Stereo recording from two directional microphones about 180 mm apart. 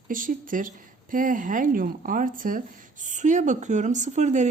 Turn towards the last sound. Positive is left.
turn(degrees=-40)  # may be behind; listen again after turning